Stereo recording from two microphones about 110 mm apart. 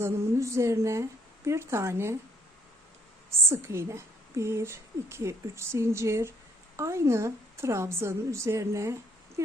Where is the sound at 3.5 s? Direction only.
25° right (ahead or behind).